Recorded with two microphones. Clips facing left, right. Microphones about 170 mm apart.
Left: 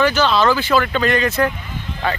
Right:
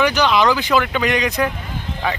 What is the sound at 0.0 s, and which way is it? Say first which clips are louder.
Speech: even; 15° right (ahead or behind).